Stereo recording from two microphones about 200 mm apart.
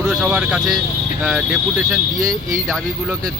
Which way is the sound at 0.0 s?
5° right (ahead or behind).